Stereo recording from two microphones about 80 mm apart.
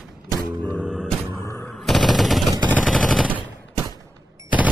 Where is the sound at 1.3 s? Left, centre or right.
Left.